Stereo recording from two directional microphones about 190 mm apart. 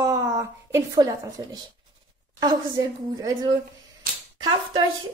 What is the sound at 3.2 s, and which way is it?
Speech, 20° right (ahead or behind).